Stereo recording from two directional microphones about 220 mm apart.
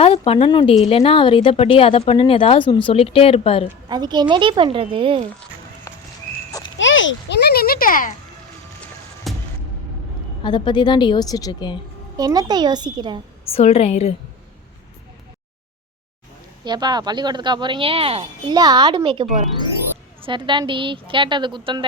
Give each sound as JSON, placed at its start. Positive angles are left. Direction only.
{"t": 0.0, "sound": "speech", "side_deg": 25}
{"t": 3.8, "sound": "a woman's voice", "side_deg": -20}
{"t": 6.7, "sound": "a child's voice", "side_deg": 60}
{"t": 9.3, "sound": "music", "side_deg": 0}
{"t": 10.4, "sound": "speech", "side_deg": 20}
{"t": 12.1, "sound": "a woman's voice", "side_deg": -15}
{"t": 13.5, "sound": "speech", "side_deg": 30}
{"t": 16.6, "sound": "a woman's voice", "side_deg": -20}